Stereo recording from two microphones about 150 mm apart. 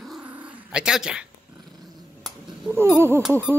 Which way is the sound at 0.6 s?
5° right (ahead or behind).